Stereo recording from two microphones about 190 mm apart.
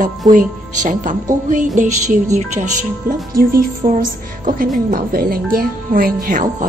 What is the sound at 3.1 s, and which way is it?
A woman's voice, 50° right (ahead or behind).